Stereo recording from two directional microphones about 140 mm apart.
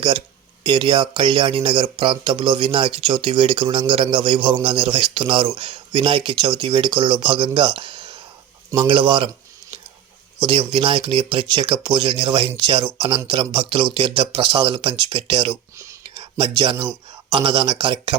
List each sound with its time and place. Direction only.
0.6 s speech: 35° right (ahead or behind)
10.4 s speech: 40° right (ahead or behind)